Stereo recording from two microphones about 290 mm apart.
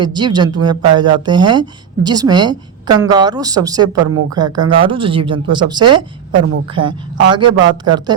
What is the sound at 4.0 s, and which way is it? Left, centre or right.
Speech, right.